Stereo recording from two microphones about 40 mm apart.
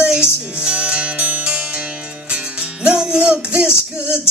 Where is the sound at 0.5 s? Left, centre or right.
Right.